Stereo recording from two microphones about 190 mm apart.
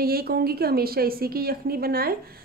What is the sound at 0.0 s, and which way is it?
A woman's voice, 55° right (ahead or behind).